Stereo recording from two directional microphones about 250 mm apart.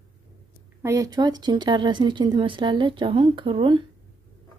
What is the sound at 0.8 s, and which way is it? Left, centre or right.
Speech, centre.